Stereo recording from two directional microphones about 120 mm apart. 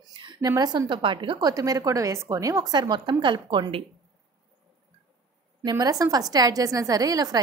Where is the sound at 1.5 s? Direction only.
30° right (ahead or behind).